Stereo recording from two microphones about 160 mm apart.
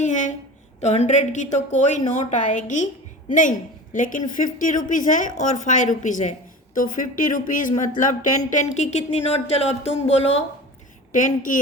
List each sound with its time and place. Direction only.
0.0 s a sound: 50° left (ahead or behind)
0.8 s a woman's voice: 45° left (ahead or behind)
11.1 s speech: 55° left (ahead or behind)